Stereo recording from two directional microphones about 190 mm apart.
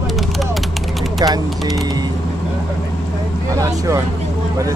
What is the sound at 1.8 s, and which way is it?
Vehicle, 20° right (ahead or behind).